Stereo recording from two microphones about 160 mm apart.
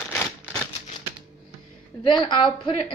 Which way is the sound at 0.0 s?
5° left (ahead or behind).